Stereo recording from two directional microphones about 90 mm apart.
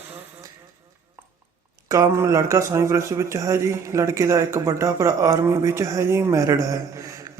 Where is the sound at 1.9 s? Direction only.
35° right (ahead or behind).